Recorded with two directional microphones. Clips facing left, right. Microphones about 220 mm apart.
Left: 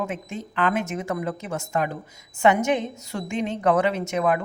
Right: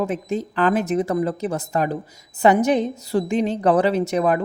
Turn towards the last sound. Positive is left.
turn(degrees=-35)  # may be behind; listen again after turning